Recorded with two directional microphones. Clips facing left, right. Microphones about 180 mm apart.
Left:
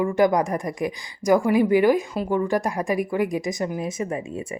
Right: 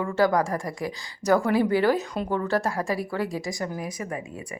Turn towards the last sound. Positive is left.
turn(degrees=25)  # may be behind; listen again after turning